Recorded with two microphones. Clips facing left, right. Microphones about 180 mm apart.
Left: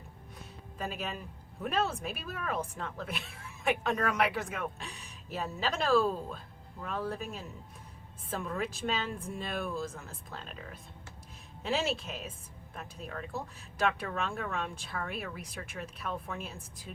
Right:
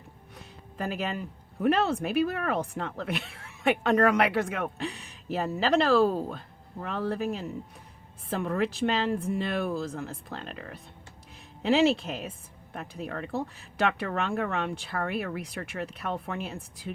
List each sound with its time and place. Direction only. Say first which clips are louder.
0.9 s speech: right 7 dB; 70° right (ahead or behind)